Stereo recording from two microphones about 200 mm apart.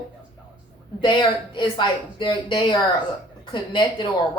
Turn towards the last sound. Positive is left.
turn(degrees=25)  # may be behind; listen again after turning